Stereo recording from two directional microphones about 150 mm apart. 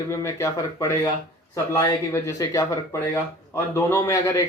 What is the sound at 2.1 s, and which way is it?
Speech, 20° left (ahead or behind).